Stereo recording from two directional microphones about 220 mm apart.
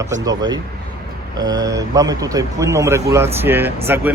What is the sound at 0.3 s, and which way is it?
A man's voice, 15° right (ahead or behind).